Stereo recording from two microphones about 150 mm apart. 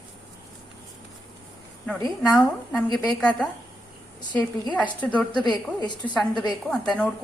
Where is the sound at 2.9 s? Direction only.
25° left (ahead or behind).